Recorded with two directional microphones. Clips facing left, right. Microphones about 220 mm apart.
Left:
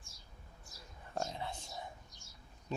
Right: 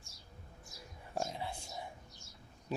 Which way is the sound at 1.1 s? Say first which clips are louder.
Right 1 dB; 10° right (ahead or behind).